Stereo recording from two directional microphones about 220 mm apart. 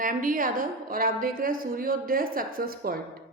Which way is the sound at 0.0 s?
40° right (ahead or behind).